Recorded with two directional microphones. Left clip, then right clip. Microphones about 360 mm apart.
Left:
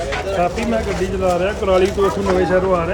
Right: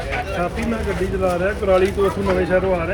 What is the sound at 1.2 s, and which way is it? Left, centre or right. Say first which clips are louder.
Speech: left 2 dB; centre.